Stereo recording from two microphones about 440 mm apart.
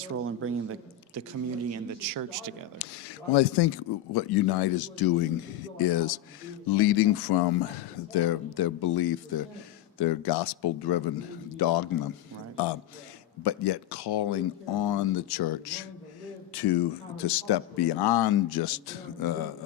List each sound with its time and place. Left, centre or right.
0.0 s speech: right
1.7 s speech: right
3.3 s speech: left